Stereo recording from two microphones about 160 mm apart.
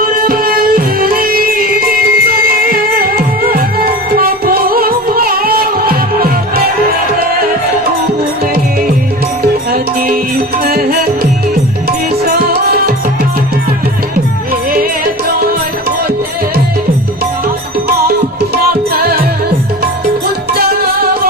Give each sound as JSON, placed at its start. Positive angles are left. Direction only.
{"t": 0.0, "sound": "music", "side_deg": -65}
{"t": 9.7, "sound": "music", "side_deg": -70}
{"t": 18.5, "sound": "music", "side_deg": -75}